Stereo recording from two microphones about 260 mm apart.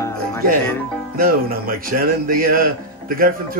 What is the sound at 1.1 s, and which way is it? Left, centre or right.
Speech, right.